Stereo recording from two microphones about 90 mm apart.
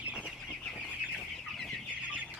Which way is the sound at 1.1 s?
5° left (ahead or behind).